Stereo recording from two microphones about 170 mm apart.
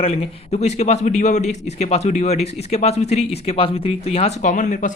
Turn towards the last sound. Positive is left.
turn(degrees=50)  # may be behind; listen again after turning